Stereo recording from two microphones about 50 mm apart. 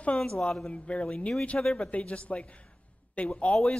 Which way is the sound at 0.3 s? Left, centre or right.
Centre.